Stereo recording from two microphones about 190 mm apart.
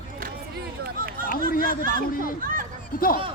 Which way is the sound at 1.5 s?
50° left (ahead or behind).